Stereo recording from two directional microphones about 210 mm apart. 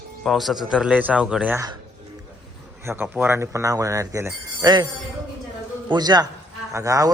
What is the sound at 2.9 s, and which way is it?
Speech, 10° right (ahead or behind).